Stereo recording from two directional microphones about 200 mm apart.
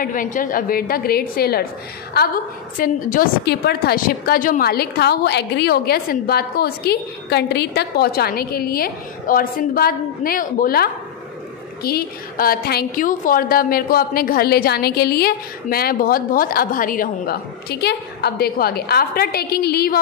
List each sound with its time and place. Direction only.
0.0 s a woman's voice: 45° left (ahead or behind)
2.8 s a woman's voice: 45° left (ahead or behind)